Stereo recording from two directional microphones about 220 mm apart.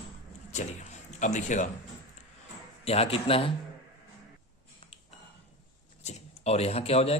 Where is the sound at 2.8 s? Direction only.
25° left (ahead or behind).